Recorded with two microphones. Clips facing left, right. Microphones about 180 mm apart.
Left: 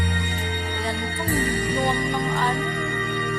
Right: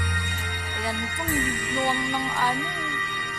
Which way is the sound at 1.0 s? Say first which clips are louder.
Left 3 dB; 35° left (ahead or behind).